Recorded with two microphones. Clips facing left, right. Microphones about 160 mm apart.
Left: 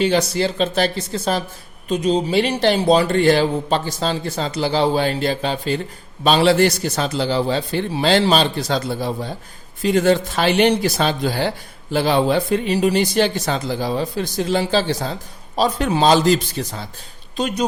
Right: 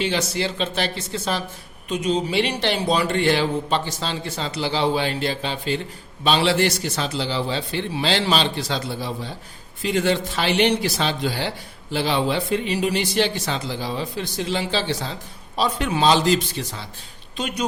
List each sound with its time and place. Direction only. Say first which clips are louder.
0.0 s speech: left 6 dB; 40° left (ahead or behind)